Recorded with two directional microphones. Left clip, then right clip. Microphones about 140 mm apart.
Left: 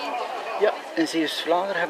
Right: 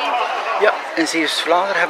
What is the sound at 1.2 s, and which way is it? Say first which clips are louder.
Speech: right 8 dB; 30° right (ahead or behind).